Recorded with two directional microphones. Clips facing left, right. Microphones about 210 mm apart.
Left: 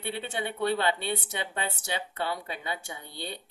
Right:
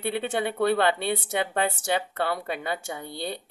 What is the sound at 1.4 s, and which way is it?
Speech, 60° right (ahead or behind).